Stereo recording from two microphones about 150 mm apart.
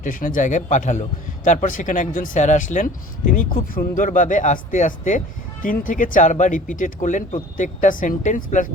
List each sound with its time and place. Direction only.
0.0 s speech: 65° left (ahead or behind)